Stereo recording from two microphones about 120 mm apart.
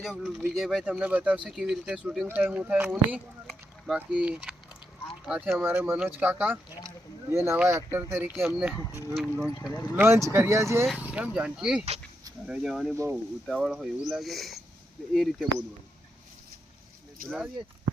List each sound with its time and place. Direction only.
0.0 s speech: 5° right (ahead or behind)
2.2 s speech: 15° right (ahead or behind)
6.8 s a sound: 20° right (ahead or behind)
7.7 s speech: 20° right (ahead or behind)
8.3 s speech: 5° right (ahead or behind)
9.9 s speech: 20° right (ahead or behind)
11.0 s speech: 10° right (ahead or behind)
12.9 s speech: 15° right (ahead or behind)
13.5 s speech: centre (ahead or behind)
17.2 s speech: 5° right (ahead or behind)